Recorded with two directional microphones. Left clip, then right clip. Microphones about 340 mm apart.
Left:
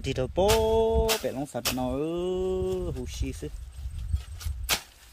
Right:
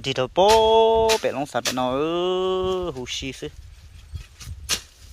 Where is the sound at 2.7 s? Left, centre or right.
Right.